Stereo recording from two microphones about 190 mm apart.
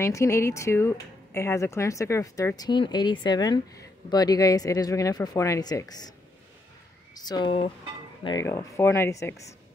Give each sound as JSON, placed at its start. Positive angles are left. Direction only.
{"t": 0.0, "sound": "speech", "side_deg": 15}
{"t": 7.2, "sound": "speech", "side_deg": 25}